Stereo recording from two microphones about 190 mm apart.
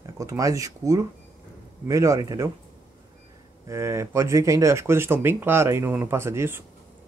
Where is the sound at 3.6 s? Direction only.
15° right (ahead or behind).